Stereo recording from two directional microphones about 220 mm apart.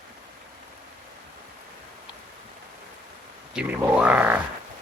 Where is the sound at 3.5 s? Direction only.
5° right (ahead or behind).